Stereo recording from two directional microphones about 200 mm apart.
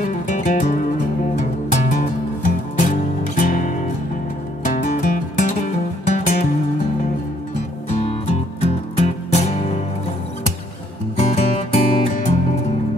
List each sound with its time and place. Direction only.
0.0 s music: 40° left (ahead or behind)
7.9 s music: 30° left (ahead or behind)
11.1 s music: 30° left (ahead or behind)